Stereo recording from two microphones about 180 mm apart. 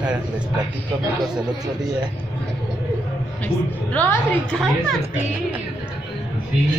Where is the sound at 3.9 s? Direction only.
5° left (ahead or behind).